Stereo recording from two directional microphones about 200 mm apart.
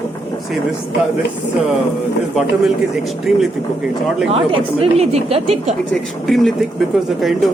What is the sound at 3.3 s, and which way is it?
Speech, centre (ahead or behind).